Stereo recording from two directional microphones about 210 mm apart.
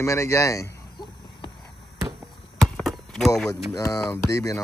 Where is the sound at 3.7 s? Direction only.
15° left (ahead or behind).